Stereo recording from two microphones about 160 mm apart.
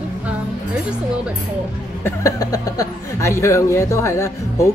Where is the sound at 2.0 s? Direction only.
20° left (ahead or behind).